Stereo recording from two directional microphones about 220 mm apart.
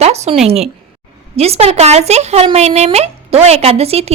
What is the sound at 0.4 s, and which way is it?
Speech, 30° right (ahead or behind).